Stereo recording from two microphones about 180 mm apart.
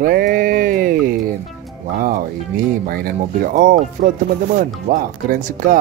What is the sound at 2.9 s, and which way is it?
Speech, 55° right (ahead or behind).